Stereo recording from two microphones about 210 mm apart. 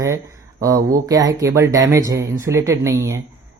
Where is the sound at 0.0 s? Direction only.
15° right (ahead or behind).